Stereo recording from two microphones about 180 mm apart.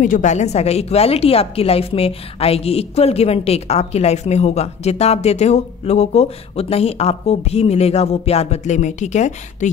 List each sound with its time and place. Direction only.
0.0 s a woman's voice: 45° left (ahead or behind)